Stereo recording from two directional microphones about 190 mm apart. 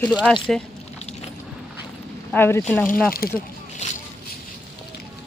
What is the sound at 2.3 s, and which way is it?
Speech, 10° left (ahead or behind).